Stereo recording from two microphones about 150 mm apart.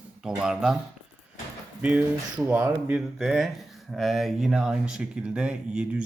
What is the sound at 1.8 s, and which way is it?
Speech, 10° right (ahead or behind).